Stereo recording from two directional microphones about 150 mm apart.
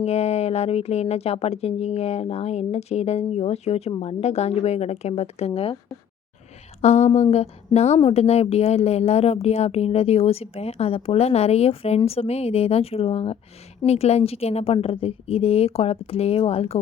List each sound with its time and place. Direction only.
0.0 s a woman's voice: 45° left (ahead or behind)
6.8 s a woman's voice: 50° left (ahead or behind)